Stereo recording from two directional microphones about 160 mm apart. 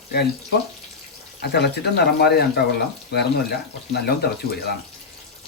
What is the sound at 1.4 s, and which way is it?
Speech, 90° left.